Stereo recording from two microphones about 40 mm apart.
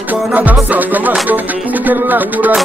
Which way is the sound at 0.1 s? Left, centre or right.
Right.